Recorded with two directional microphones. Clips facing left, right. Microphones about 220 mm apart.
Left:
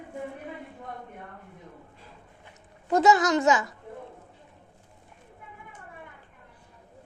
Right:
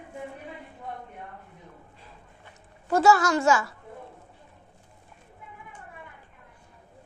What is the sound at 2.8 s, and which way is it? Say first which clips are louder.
Speech: even; 20° left (ahead or behind).